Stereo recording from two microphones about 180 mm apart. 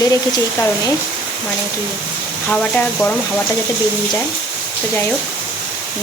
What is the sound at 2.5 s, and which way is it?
Speech, 5° left (ahead or behind).